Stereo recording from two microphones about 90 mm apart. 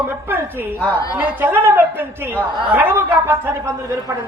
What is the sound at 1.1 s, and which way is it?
A man's voice, 20° right (ahead or behind).